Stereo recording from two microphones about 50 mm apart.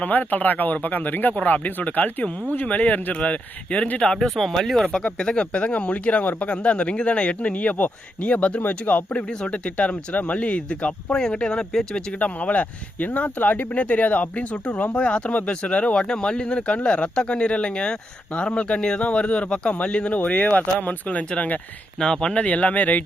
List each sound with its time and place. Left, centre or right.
0.0 s speech: left
4.2 s speech: centre
4.9 s speech: centre
12.2 s speech: left
22.0 s speech: centre
22.4 s speech: left